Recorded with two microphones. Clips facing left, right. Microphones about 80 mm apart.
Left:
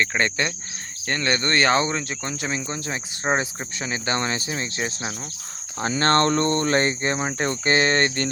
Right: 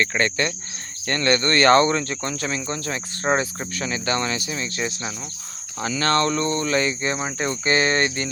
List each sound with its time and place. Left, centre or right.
0.0 s speech: centre; by 8.3 s left